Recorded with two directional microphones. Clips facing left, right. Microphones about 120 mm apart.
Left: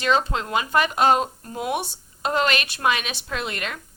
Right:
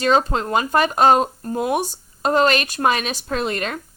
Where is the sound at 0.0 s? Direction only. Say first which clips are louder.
Right 4 dB; 40° right (ahead or behind).